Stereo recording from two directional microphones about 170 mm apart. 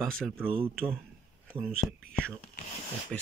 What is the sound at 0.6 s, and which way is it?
Speech, 15° right (ahead or behind).